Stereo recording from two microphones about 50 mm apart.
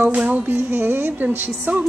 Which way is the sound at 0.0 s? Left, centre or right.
Right.